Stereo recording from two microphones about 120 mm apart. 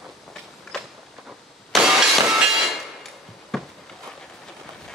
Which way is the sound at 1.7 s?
5° right (ahead or behind).